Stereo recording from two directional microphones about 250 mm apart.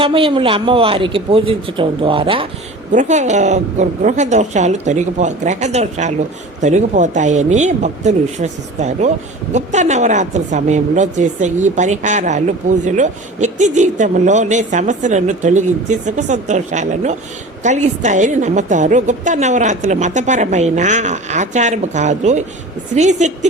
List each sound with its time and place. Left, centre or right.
0.0 s a woman's voice: right